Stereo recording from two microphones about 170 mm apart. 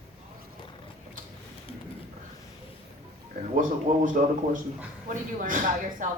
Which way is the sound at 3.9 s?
45° right (ahead or behind).